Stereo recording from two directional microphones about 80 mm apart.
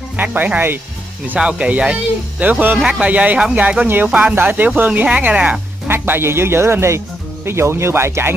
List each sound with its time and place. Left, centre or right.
0.2 s speech: right
5.9 s speech: right